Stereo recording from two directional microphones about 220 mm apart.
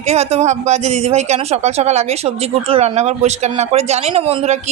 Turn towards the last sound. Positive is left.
turn(degrees=-30)  # may be behind; listen again after turning